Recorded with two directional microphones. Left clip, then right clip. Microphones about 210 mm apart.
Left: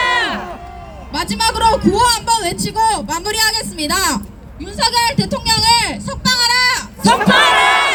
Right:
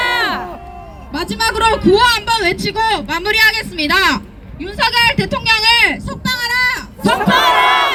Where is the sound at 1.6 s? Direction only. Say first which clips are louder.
Right 2 dB; 45° left (ahead or behind).